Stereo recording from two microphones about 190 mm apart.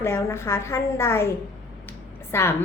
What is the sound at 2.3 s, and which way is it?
Speech, 15° left (ahead or behind).